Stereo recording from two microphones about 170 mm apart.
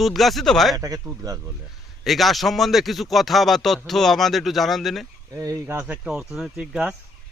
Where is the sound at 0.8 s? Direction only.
20° right (ahead or behind).